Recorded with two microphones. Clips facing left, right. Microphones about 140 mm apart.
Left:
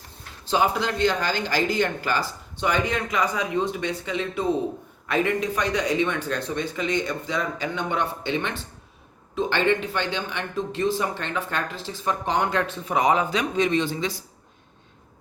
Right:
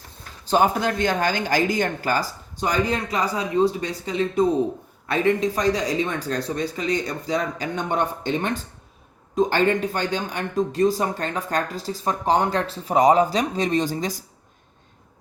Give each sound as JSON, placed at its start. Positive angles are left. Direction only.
{"t": 0.4, "sound": "speech", "side_deg": -45}